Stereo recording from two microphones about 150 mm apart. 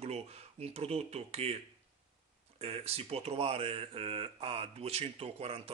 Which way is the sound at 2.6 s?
40° right (ahead or behind).